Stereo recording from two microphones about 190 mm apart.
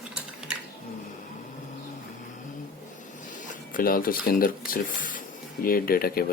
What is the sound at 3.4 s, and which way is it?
Speech, 45° left (ahead or behind).